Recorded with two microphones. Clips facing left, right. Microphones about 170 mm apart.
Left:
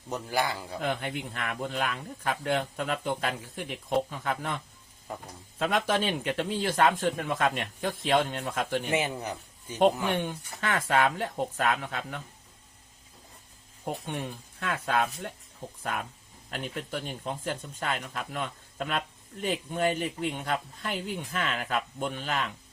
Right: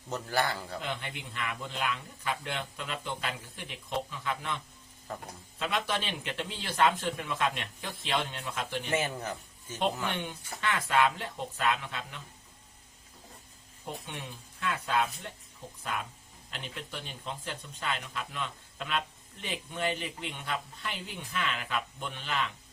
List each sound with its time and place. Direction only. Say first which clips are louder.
0.1 s a man's voice: left 1 dB; 10° left (ahead or behind)
0.8 s speech: left 6 dB; 50° left (ahead or behind)
5.1 s a man's voice: left 1 dB; 15° left (ahead or behind)
5.5 s speech: left 6 dB; 45° left (ahead or behind)
8.9 s a man's voice: left 2 dB; 15° left (ahead or behind)
10.1 s speech: left 6 dB; 45° left (ahead or behind)
13.8 s speech: left 7 dB; 50° left (ahead or behind)
16.5 s speech: left 7 dB; 45° left (ahead or behind)